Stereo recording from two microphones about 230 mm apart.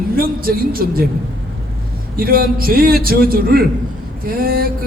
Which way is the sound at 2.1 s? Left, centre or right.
Right.